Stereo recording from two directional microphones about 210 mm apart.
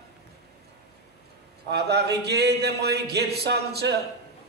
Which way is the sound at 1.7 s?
50° right (ahead or behind).